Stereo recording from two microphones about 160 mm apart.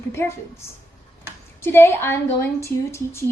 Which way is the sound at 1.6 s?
15° left (ahead or behind).